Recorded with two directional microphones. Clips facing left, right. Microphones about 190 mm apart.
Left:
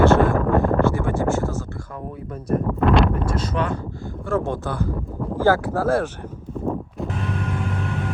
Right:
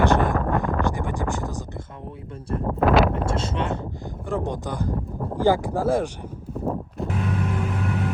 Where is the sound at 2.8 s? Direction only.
5° right (ahead or behind).